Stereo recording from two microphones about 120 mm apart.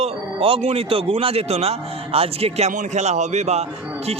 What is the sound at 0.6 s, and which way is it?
A man's voice, 55° right (ahead or behind).